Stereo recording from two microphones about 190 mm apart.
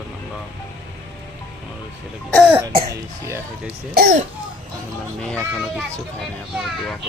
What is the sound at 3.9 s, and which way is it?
Speech, 50° right (ahead or behind).